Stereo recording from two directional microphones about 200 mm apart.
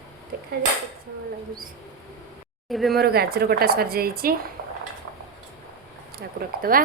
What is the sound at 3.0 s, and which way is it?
A woman's voice, 50° right (ahead or behind).